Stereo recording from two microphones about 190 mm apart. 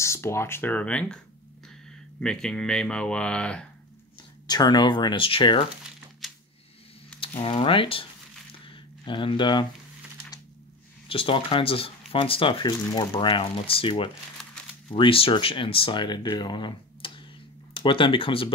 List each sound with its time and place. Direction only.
0.0 s speech: 15° left (ahead or behind)
4.5 s speech: 20° left (ahead or behind)
6.2 s a sound: centre (ahead or behind)
7.2 s mechanisms: 30° left (ahead or behind)
8.7 s speech: 25° left (ahead or behind)
11.1 s speech: 30° left (ahead or behind)